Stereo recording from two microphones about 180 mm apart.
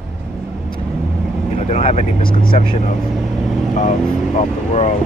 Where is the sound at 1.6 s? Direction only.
35° left (ahead or behind).